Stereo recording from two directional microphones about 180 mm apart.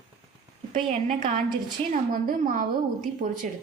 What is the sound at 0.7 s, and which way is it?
A woman's voice, 40° right (ahead or behind).